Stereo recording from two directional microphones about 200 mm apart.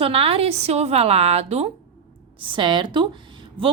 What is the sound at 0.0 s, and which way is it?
A woman's voice, 30° right (ahead or behind).